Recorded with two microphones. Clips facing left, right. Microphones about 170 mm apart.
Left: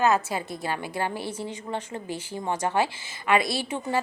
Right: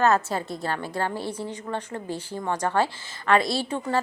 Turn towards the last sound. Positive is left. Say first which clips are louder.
# right 2 dB
turn(degrees=20)  # may be behind; listen again after turning